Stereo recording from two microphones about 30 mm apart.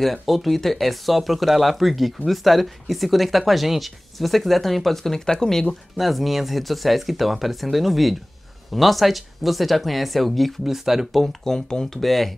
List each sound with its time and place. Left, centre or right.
0.0 s speech: centre
5.9 s speech: centre
10.6 s speech: centre
11.4 s speech: centre
11.8 s speech: centre